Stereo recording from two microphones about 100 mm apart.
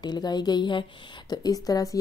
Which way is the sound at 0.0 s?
45° left (ahead or behind).